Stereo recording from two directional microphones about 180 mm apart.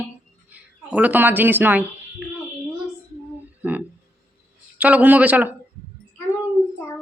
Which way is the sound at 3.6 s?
10° right (ahead or behind).